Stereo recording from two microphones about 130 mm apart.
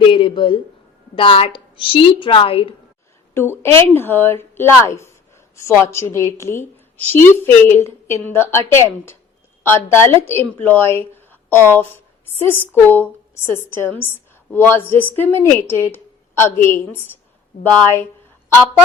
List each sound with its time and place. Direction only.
0.1 s a sound: 40° left (ahead or behind)
1.1 s a woman's voice: 45° left (ahead or behind)
3.6 s a woman's voice: 20° left (ahead or behind)
17.6 s a woman's voice: 15° left (ahead or behind)